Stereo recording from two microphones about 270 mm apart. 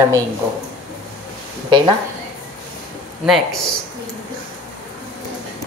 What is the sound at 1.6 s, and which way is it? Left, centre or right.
Speech, centre.